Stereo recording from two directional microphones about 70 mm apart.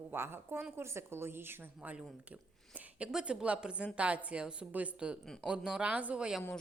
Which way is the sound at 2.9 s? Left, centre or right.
Centre.